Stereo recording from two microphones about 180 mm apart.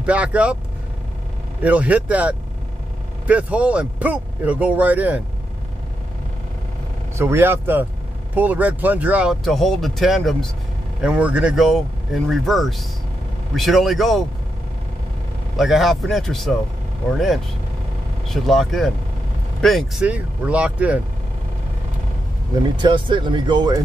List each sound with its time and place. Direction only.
0.0 s speech: 5° right (ahead or behind)
1.6 s speech: 10° right (ahead or behind)
7.2 s speech: 15° right (ahead or behind)
15.5 s speech: centre (ahead or behind)
18.3 s speech: centre (ahead or behind)
22.8 s speech: 25° right (ahead or behind)